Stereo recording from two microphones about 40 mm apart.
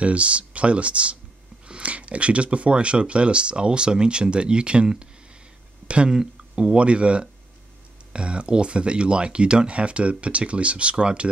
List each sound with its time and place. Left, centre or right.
0.0 s speech: right
6.0 s speech: centre